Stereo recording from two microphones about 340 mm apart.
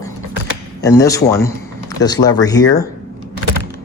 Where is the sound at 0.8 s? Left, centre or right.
Centre.